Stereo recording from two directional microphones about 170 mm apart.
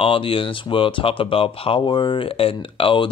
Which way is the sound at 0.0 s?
30° left (ahead or behind).